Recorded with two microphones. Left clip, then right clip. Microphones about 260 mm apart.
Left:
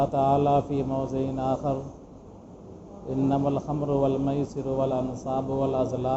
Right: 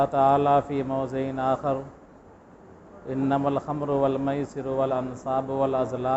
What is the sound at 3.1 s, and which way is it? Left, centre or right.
Mantra, right.